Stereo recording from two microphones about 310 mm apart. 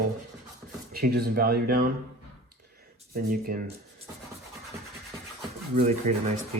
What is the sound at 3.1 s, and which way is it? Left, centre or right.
Speech, right.